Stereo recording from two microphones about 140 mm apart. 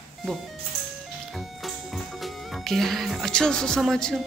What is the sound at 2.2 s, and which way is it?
Speech, centre (ahead or behind).